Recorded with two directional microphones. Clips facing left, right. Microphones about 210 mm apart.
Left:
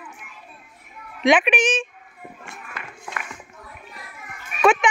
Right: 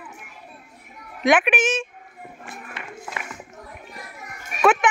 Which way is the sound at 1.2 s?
5° right (ahead or behind).